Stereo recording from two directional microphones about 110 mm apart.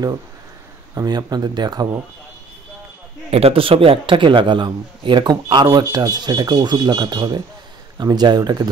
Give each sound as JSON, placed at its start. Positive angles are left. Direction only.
{"t": 0.9, "sound": "speech", "side_deg": -40}
{"t": 3.3, "sound": "a man's voice", "side_deg": -65}